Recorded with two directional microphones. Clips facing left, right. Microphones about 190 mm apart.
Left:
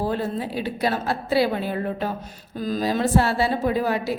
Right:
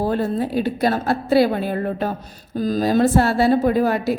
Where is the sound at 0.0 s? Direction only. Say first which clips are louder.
Right 5 dB; 45° right (ahead or behind).